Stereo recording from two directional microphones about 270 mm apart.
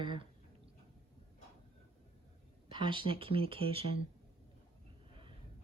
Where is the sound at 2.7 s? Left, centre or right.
Centre.